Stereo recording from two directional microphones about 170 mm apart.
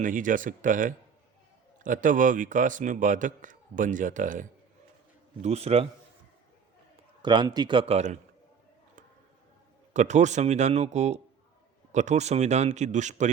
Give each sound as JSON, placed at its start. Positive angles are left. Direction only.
{"t": 0.0, "sound": "a man's voice", "side_deg": -50}
{"t": 5.4, "sound": "a man's voice", "side_deg": -40}
{"t": 7.2, "sound": "a man's voice", "side_deg": -25}
{"t": 9.9, "sound": "a man's voice", "side_deg": -45}